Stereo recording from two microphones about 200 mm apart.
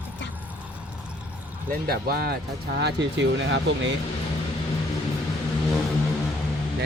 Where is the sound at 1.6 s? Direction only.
50° right (ahead or behind).